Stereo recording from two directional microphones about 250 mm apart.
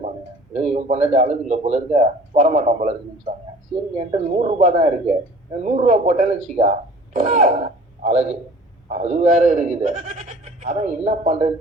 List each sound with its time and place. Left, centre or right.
0.7 s a man's voice: right